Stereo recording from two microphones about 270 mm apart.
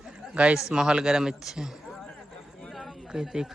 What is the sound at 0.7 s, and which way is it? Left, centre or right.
A man's voice, centre.